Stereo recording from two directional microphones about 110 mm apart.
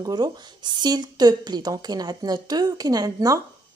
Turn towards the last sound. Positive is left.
turn(degrees=-35)  # may be behind; listen again after turning